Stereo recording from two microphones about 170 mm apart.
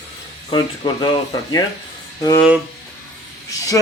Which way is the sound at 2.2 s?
20° left (ahead or behind).